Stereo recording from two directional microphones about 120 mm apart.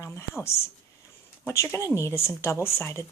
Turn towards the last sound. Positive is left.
turn(degrees=20)  # may be behind; listen again after turning